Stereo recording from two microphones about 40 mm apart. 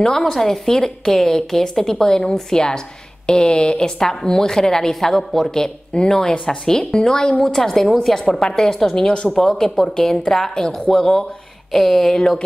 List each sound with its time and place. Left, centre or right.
0.2 s a woman's voice: centre; by 3.9 s left
4.0 s a woman's voice: centre